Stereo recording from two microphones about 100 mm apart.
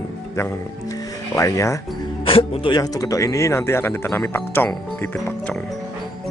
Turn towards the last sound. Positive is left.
turn(degrees=20)  # may be behind; listen again after turning